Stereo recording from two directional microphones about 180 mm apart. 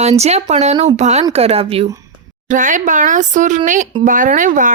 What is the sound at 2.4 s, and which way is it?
Speech, 45° right (ahead or behind).